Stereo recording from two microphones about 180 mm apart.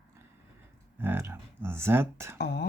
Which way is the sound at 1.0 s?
15° right (ahead or behind).